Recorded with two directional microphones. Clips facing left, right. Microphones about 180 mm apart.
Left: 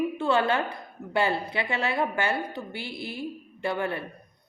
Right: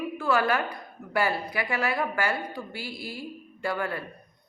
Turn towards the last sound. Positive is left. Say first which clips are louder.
# left 1 dB
turn(degrees=25)  # may be behind; listen again after turning